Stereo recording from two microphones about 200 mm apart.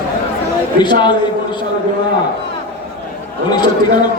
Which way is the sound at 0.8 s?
20° left (ahead or behind).